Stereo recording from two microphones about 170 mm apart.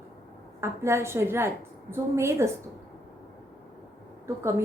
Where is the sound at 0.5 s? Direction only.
15° right (ahead or behind).